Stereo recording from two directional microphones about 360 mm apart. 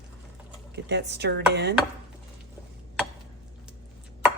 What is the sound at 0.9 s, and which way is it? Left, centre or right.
Speech, right.